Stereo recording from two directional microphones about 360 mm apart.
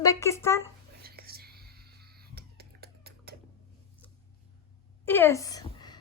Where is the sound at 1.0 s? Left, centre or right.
Right.